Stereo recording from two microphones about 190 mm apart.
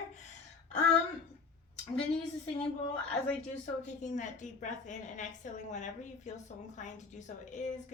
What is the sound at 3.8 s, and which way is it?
A woman's voice, 40° left (ahead or behind).